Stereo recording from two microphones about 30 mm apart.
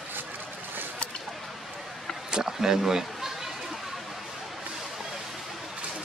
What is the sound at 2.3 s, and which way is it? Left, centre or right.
Speech, centre.